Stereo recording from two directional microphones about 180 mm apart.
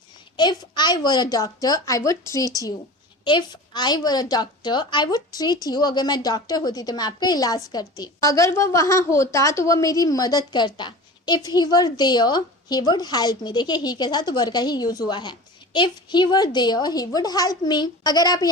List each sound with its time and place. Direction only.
0.3 s a woman's voice: 25° left (ahead or behind)